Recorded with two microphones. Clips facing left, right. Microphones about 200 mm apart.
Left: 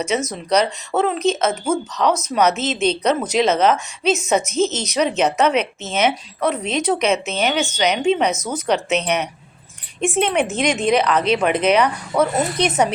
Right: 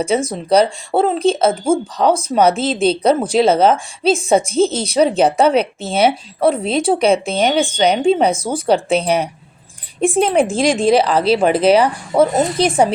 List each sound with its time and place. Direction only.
0.0 s speech: 30° right (ahead or behind)